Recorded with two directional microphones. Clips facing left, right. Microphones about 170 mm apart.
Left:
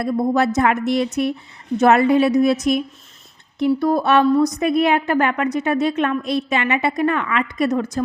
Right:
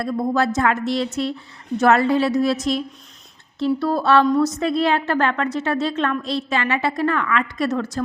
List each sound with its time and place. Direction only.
0.0 s a woman's voice: 20° left (ahead or behind)
3.8 s a woman's voice: 15° left (ahead or behind)